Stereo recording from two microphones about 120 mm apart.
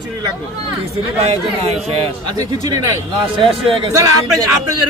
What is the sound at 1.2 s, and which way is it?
Speech, 55° right (ahead or behind).